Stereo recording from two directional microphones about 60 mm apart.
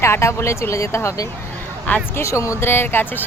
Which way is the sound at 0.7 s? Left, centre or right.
Left.